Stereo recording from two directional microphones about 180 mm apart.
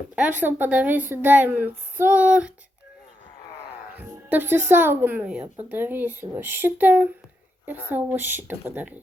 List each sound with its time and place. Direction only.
0.3 s speech: 10° right (ahead or behind)
3.9 s speech: 10° right (ahead or behind)